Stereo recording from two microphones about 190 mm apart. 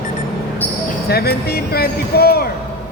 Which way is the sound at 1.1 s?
55° left (ahead or behind).